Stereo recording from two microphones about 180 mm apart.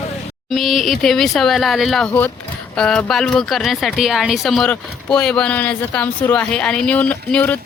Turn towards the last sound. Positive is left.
turn(degrees=10)  # may be behind; listen again after turning